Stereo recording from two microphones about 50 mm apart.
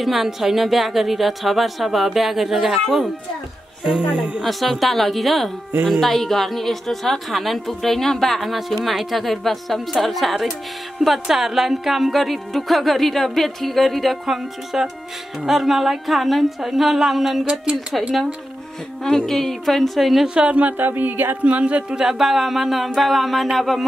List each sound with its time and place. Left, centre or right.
0.0 s a woman's voice: centre
4.4 s a woman's voice: centre
19.0 s a woman's voice: centre
20.5 s music: right
21.5 s speech: right
21.9 s a woman's voice: centre